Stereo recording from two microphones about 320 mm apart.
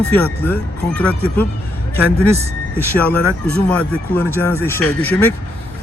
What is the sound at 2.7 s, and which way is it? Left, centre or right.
Speech, centre.